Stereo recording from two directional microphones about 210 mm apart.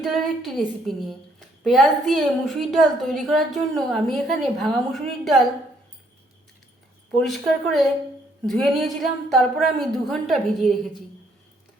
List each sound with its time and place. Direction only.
0.0 s a woman's voice: centre (ahead or behind)
7.1 s a woman's voice: centre (ahead or behind)